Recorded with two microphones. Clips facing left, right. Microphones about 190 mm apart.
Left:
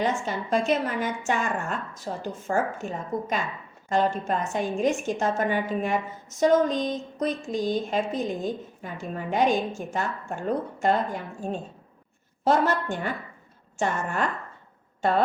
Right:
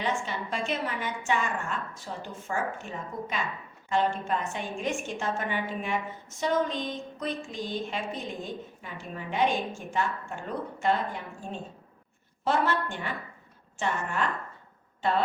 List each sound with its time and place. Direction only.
0.0 s a woman's voice: 45° left (ahead or behind)